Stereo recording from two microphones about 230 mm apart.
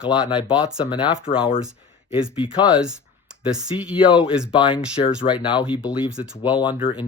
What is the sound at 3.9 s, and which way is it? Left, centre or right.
Speech, left.